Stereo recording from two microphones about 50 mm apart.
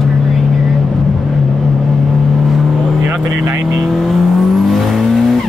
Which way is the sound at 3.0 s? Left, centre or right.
Centre.